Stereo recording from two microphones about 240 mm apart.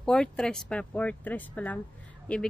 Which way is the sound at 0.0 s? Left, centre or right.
Centre.